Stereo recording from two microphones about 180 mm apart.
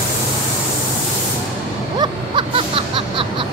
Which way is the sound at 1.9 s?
30° right (ahead or behind).